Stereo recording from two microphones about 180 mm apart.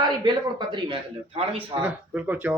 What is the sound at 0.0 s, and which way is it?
A man's voice, 25° right (ahead or behind).